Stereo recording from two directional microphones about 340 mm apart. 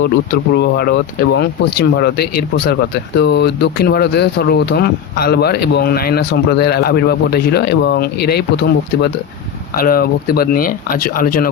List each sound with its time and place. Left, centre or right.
0.5 s speech: left